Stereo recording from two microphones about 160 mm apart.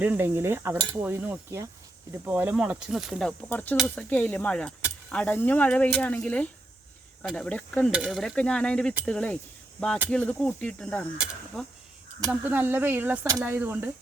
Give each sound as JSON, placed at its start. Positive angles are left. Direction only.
{"t": 0.0, "sound": "speech", "side_deg": -10}
{"t": 12.2, "sound": "speech", "side_deg": -10}